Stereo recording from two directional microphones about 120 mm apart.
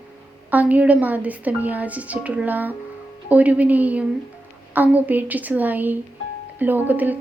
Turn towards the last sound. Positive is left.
turn(degrees=-15)  # may be behind; listen again after turning